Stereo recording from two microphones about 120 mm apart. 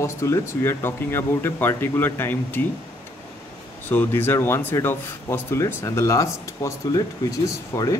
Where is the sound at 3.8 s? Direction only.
15° left (ahead or behind).